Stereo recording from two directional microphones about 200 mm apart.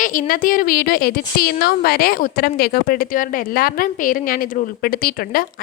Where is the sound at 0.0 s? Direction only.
45° left (ahead or behind).